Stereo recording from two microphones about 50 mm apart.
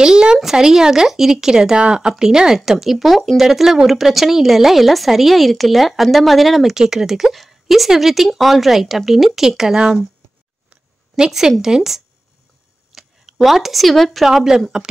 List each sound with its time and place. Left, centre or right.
0.0 s a woman's voice: centre
11.1 s speech: centre
14.3 s speech: centre